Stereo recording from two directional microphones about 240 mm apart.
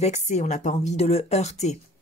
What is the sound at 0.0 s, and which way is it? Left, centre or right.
Speech, left.